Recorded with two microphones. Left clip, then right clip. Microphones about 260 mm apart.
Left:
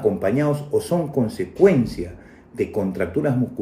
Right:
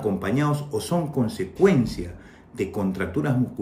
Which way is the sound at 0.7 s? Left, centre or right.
Left.